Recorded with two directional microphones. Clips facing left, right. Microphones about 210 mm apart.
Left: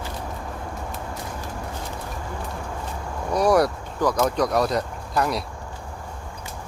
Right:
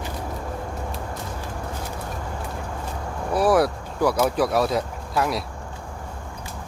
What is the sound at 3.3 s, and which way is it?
Speech, 5° right (ahead or behind).